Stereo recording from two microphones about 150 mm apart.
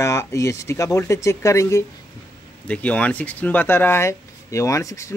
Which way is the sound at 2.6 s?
10° left (ahead or behind).